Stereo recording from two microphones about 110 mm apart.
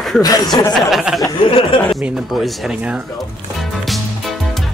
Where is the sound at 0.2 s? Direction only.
35° left (ahead or behind).